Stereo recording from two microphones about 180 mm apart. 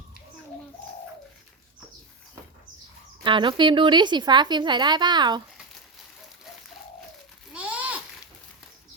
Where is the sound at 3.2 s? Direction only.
25° right (ahead or behind).